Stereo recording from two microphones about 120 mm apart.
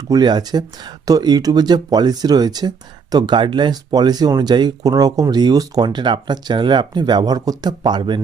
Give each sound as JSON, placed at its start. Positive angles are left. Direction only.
{"t": 0.1, "sound": "speech", "side_deg": -35}